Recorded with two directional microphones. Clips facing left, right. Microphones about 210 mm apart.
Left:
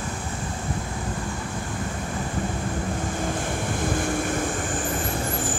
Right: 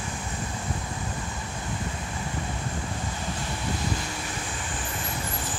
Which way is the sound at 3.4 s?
50° left (ahead or behind).